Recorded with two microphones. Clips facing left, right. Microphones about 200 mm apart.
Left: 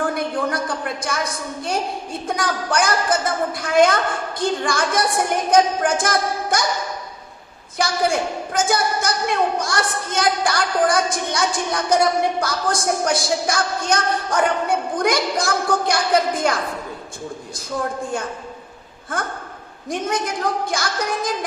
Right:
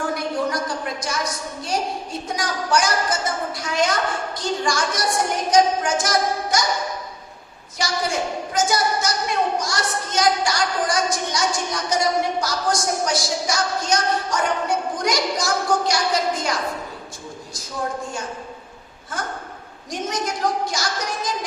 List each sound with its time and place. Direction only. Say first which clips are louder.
0.1 s a sound: left 1 dB; 55° left (ahead or behind)
2.2 s a woman's voice: left 4 dB; 55° left (ahead or behind)
7.8 s a woman's voice: left 4 dB; 55° left (ahead or behind)
19.1 s a woman's voice: left 2 dB; 55° left (ahead or behind)